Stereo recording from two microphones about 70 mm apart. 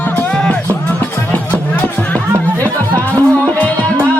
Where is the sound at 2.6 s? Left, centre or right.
Left.